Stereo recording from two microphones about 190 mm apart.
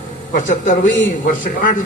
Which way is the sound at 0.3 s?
45° left (ahead or behind).